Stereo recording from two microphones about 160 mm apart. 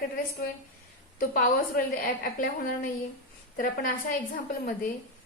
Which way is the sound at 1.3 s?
65° left (ahead or behind).